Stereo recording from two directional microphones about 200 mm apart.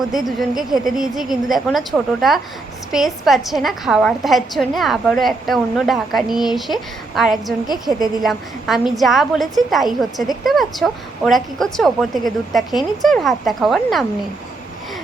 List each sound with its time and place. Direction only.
0.3 s a woman's voice: centre (ahead or behind)